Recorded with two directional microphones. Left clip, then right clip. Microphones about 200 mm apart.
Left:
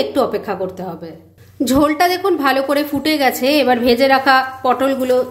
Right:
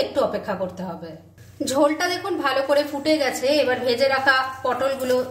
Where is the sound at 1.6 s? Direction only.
40° left (ahead or behind).